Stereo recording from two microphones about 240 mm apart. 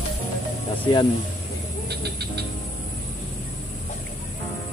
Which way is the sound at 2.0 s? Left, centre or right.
Right.